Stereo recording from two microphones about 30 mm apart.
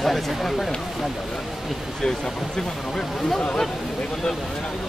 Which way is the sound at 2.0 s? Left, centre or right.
Left.